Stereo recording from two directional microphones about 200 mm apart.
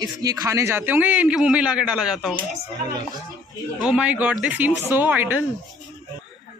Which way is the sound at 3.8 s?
5° right (ahead or behind).